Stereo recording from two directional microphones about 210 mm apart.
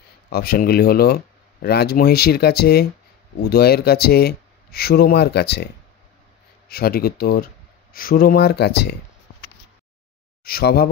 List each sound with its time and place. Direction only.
0.3 s speech: 45° left (ahead or behind)
6.7 s speech: 45° left (ahead or behind)
10.4 s speech: 45° left (ahead or behind)